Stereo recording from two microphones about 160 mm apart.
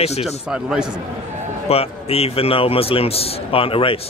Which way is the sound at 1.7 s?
40° left (ahead or behind).